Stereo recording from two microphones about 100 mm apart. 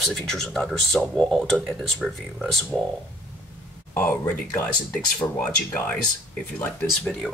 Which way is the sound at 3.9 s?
20° left (ahead or behind).